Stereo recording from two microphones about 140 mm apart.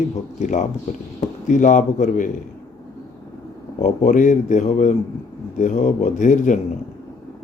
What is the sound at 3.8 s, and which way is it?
Speech, 65° left (ahead or behind).